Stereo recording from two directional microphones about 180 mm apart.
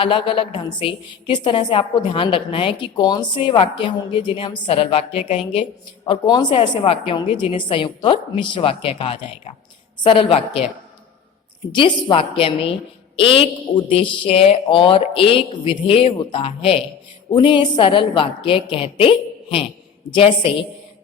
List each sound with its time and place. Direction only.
0.0 s a woman's voice: 30° left (ahead or behind)
11.7 s a woman's voice: 25° left (ahead or behind)
20.1 s a woman's voice: 30° left (ahead or behind)